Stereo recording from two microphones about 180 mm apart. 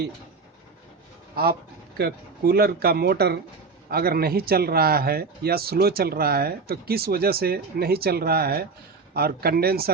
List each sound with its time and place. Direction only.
1.4 s speech: 55° right (ahead or behind)